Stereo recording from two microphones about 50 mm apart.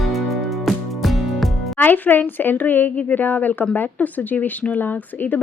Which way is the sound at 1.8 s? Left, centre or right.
Left.